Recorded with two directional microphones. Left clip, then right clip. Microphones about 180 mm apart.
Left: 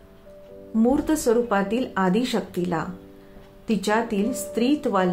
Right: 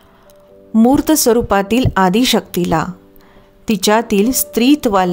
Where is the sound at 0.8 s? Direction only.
65° right (ahead or behind).